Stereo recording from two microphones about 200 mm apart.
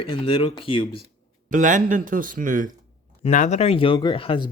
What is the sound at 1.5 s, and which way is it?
Speech, 40° right (ahead or behind).